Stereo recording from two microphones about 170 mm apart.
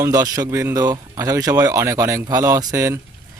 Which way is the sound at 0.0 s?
20° right (ahead or behind).